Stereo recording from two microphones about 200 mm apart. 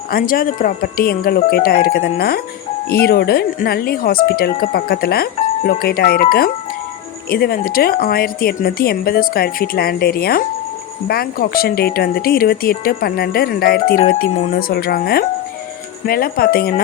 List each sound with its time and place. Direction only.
0.1 s speech: 45° left (ahead or behind)